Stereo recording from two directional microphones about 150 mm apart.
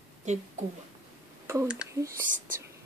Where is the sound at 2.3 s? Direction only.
60° right (ahead or behind).